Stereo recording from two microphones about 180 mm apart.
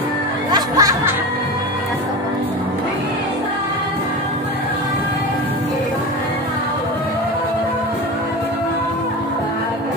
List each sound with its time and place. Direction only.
0.5 s music: 20° right (ahead or behind)